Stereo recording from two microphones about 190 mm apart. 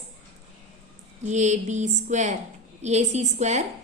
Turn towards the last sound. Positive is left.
turn(degrees=-35)  # may be behind; listen again after turning